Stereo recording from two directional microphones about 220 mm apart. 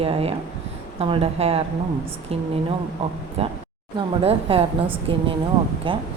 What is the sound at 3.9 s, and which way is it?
Speech, 25° right (ahead or behind).